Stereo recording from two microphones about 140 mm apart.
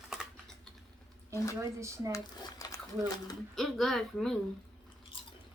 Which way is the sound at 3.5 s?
Centre (ahead or behind).